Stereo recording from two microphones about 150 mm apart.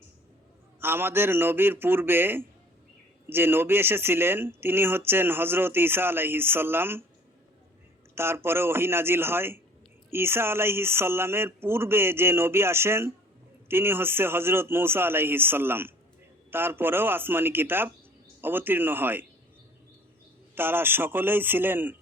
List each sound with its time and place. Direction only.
0.8 s speech: 15° right (ahead or behind)
8.1 s speech: 15° right (ahead or behind)
20.6 s speech: 15° right (ahead or behind)